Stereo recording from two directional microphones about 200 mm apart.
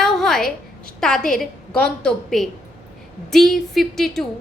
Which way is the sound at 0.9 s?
5° left (ahead or behind).